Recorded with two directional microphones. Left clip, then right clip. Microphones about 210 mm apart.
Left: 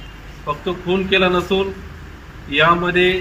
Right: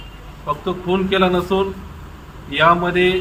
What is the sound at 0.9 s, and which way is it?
A man's voice, centre (ahead or behind).